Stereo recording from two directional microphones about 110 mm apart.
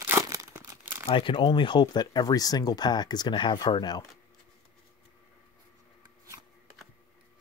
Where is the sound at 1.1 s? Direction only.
50° left (ahead or behind).